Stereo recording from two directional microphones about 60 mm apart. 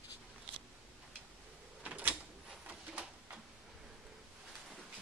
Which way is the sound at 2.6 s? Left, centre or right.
Right.